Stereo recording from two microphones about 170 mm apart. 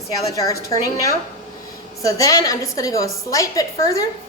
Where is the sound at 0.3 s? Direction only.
20° left (ahead or behind).